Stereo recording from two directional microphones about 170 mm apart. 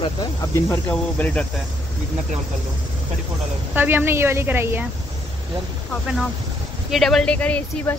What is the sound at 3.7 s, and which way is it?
A woman's voice, 10° right (ahead or behind).